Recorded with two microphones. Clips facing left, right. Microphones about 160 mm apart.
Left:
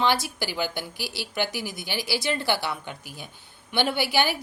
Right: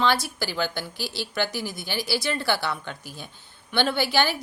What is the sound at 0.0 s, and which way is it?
A woman's voice, 15° left (ahead or behind).